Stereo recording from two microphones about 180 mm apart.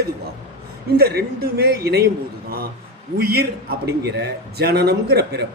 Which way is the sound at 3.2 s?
60° right (ahead or behind).